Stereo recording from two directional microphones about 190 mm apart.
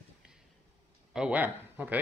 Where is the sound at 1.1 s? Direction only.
5° right (ahead or behind).